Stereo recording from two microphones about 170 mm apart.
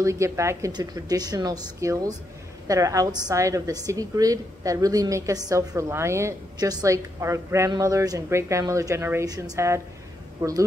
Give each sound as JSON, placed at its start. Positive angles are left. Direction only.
{"t": 0.0, "sound": "a woman's voice", "side_deg": -15}